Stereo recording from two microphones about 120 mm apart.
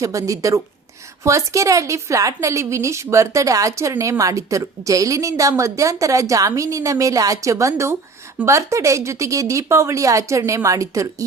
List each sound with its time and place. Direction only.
0.0 s a woman's voice: 25° right (ahead or behind)